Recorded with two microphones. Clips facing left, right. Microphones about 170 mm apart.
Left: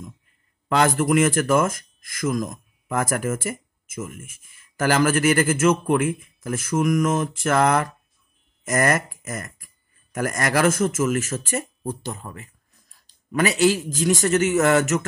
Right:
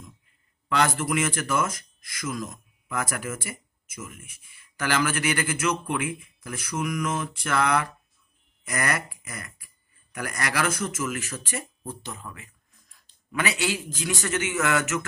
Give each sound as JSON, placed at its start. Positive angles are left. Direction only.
{"t": 0.7, "sound": "a man's voice", "side_deg": 45}